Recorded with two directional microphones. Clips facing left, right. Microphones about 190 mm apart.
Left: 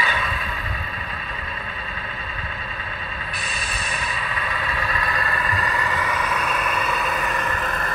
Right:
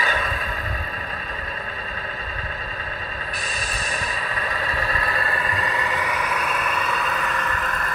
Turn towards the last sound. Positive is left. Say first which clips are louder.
# left 1 dB
turn(degrees=25)  # may be behind; listen again after turning